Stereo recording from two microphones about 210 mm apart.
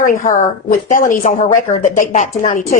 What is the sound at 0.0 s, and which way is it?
Speech, 40° left (ahead or behind).